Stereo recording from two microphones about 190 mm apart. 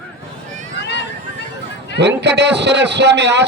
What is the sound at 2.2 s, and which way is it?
Speech, 65° right (ahead or behind).